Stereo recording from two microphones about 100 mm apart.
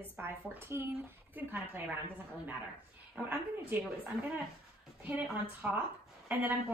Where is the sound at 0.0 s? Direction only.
20° right (ahead or behind).